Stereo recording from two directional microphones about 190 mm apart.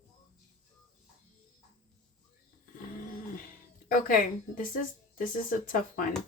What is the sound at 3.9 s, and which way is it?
Speech, 45° left (ahead or behind).